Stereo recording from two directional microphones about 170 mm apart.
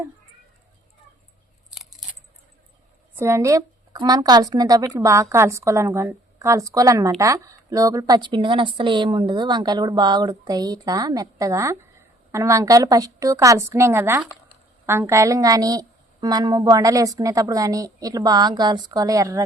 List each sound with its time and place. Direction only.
3.2 s a woman's voice: 15° right (ahead or behind)